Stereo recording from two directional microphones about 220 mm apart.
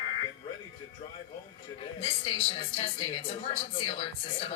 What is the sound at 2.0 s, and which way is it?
Speech, 25° left (ahead or behind).